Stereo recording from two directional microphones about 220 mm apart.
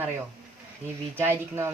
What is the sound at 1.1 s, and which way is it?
Speech, 10° right (ahead or behind).